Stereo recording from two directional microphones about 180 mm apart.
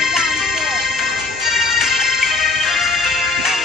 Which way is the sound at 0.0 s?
Centre (ahead or behind).